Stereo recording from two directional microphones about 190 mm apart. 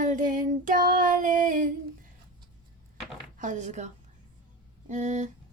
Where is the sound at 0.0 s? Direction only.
45° right (ahead or behind).